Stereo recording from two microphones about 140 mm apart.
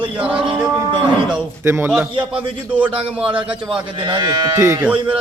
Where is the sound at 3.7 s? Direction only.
35° right (ahead or behind).